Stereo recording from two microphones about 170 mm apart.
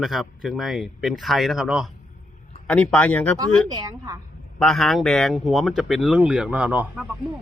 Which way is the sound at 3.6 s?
20° right (ahead or behind).